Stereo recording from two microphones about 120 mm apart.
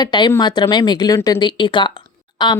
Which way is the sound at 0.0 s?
40° left (ahead or behind).